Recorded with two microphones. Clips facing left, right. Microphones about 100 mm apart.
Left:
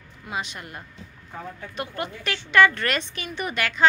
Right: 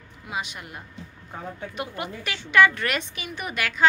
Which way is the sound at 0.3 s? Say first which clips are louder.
Left 1 dB; 10° right (ahead or behind).